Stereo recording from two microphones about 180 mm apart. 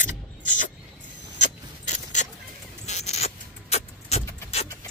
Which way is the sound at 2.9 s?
40° left (ahead or behind).